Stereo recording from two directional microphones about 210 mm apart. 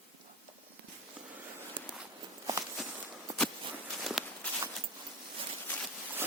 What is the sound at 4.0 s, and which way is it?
Walk, centre (ahead or behind).